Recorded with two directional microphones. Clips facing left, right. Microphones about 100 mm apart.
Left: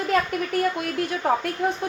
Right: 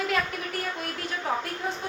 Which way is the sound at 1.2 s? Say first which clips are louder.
Left 6 dB; 55° left (ahead or behind).